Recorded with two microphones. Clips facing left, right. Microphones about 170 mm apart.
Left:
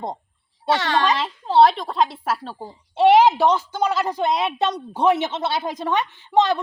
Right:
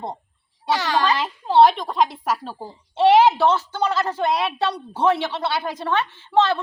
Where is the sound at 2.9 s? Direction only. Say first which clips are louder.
Left 1 dB; 10° left (ahead or behind).